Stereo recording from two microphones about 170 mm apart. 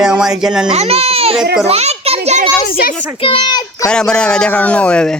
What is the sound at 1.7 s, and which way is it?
Children playing, 35° right (ahead or behind).